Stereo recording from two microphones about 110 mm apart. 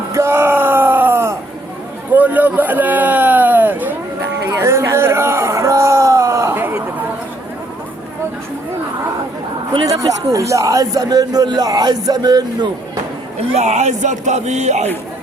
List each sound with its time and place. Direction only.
0.1 s a sound: 25° right (ahead or behind)
9.8 s speech: 30° right (ahead or behind)
13.6 s speech: 90° right